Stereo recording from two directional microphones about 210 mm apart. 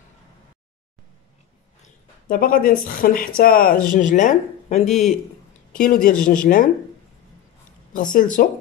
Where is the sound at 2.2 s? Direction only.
45° left (ahead or behind).